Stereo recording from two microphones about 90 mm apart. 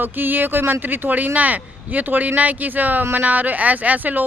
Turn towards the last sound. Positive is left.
turn(degrees=-20)  # may be behind; listen again after turning